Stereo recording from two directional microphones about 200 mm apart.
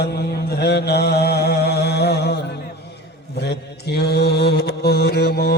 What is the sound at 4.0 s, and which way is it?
Mantra, 55° left (ahead or behind).